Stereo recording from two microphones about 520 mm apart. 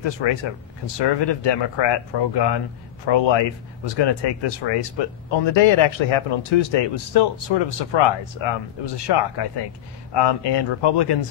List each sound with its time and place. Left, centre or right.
0.0 s speech: left